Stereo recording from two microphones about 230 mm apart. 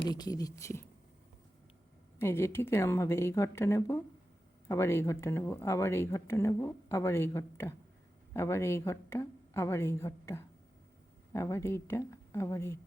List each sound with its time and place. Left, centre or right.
0.1 s speech: centre
2.1 s a woman's voice: centre